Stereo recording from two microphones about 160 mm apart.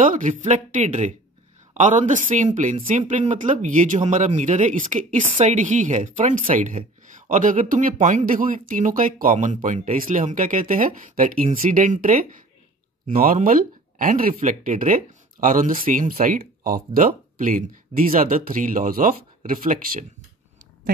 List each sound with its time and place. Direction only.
0.0 s speech: 55° right (ahead or behind)